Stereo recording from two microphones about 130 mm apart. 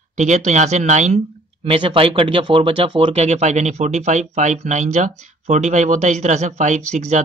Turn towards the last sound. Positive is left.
turn(degrees=-65)  # may be behind; listen again after turning